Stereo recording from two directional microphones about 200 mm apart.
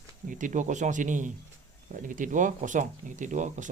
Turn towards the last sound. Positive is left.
turn(degrees=-40)  # may be behind; listen again after turning